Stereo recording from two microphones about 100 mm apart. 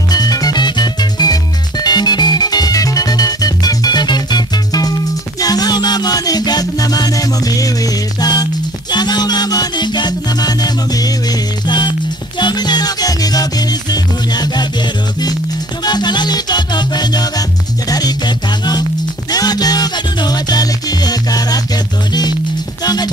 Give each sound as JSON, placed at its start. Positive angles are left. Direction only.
{"t": 0.1, "sound": "music", "side_deg": 40}
{"t": 15.8, "sound": "music", "side_deg": 45}